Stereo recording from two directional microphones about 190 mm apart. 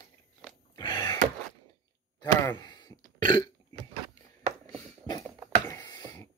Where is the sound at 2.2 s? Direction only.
15° left (ahead or behind).